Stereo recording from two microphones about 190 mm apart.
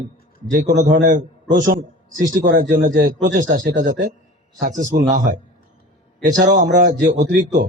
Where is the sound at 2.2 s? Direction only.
45° right (ahead or behind).